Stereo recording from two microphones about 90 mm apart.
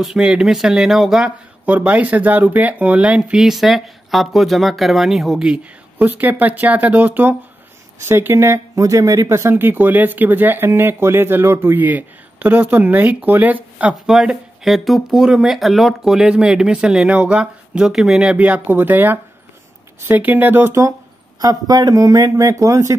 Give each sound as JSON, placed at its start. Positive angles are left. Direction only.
{"t": 0.0, "sound": "speech", "side_deg": -5}
{"t": 1.7, "sound": "speech", "side_deg": -15}
{"t": 14.1, "sound": "speech", "side_deg": -5}
{"t": 18.4, "sound": "speech", "side_deg": -20}
{"t": 21.4, "sound": "speech", "side_deg": -45}